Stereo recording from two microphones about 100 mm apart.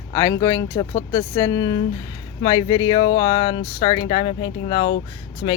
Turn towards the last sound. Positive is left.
turn(degrees=55)  # may be behind; listen again after turning